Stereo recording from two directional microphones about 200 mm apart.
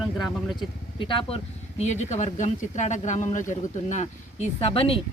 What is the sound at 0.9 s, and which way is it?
A woman's voice, 25° left (ahead or behind).